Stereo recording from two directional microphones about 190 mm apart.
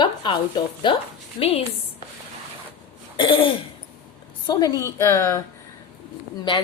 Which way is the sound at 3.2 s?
25° left (ahead or behind).